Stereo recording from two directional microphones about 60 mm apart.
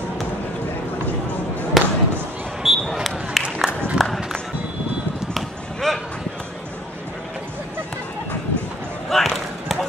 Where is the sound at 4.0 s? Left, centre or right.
Centre.